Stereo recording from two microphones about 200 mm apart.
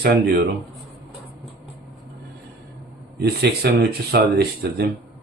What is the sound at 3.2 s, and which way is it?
Speech, 55° right (ahead or behind).